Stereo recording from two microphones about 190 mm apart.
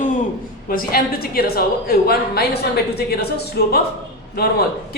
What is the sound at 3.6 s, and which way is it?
Speech, 55° left (ahead or behind).